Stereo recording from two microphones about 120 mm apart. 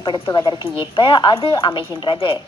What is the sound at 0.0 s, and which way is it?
A woman's voice, 40° left (ahead or behind).